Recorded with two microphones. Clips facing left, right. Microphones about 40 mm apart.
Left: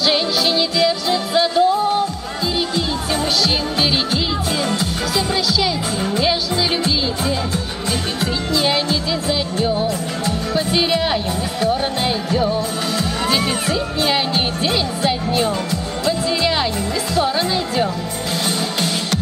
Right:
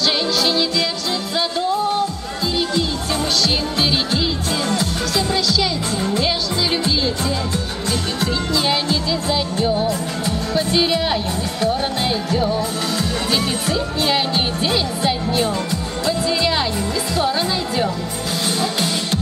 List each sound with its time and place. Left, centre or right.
0.0 s music: centre
4.6 s music: centre